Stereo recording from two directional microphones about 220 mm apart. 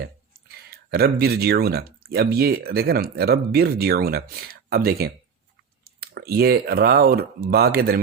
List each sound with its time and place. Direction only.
0.0 s speech: 45° right (ahead or behind)